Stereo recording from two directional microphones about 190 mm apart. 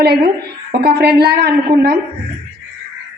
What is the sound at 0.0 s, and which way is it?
A woman's voice, 55° right (ahead or behind).